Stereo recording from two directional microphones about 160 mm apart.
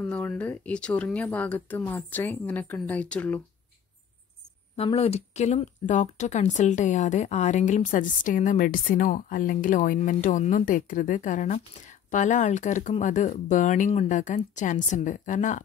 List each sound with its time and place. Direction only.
0.1 s speech: 5° left (ahead or behind)
4.7 s speech: 40° left (ahead or behind)